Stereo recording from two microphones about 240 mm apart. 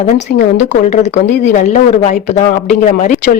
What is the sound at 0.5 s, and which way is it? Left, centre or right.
Speech, left.